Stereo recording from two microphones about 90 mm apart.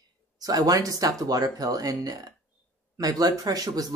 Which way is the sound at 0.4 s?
45° right (ahead or behind).